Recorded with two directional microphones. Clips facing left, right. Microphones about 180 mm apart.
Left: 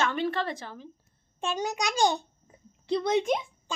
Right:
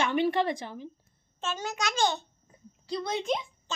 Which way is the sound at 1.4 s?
15° left (ahead or behind).